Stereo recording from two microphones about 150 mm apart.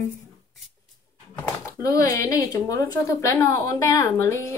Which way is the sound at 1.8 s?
25° left (ahead or behind).